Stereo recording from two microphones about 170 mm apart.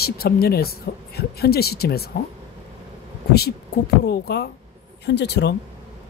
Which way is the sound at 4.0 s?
75° left (ahead or behind).